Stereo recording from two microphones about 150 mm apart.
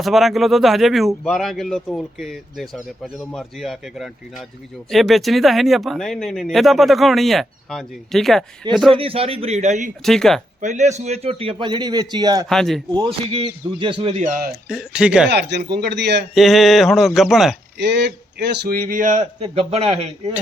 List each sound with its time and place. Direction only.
0.0 s speech: centre (ahead or behind)
8.9 s a man's voice: 40° right (ahead or behind); by 9.9 s 55° right (ahead or behind)
10.0 s speech: 5° left (ahead or behind)
10.6 s a man's voice: 55° right (ahead or behind); by 12.5 s 25° right (ahead or behind)
12.5 s speech: 5° left (ahead or behind)
12.9 s a man's voice: 30° right (ahead or behind)
14.5 s speech: 5° right (ahead or behind)
15.3 s a man's voice: 90° right
16.3 s speech: centre (ahead or behind)
18.6 s speech: 80° right; by 19.2 s 60° right (ahead or behind)
19.4 s speech: 45° right (ahead or behind)